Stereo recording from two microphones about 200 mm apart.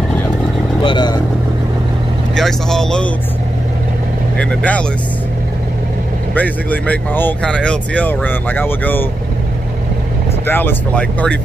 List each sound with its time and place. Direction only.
0.8 s speech: 25° left (ahead or behind)
2.3 s speech: centre (ahead or behind)
4.4 s speech: 5° left (ahead or behind)
6.3 s speech: 10° left (ahead or behind)
10.4 s speech: 10° left (ahead or behind)